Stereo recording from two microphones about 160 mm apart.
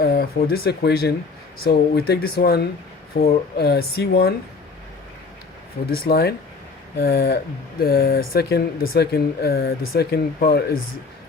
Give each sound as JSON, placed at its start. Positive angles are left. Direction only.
{"t": 0.0, "sound": "speech", "side_deg": 70}
{"t": 1.6, "sound": "speech", "side_deg": 75}
{"t": 5.9, "sound": "speech", "side_deg": 80}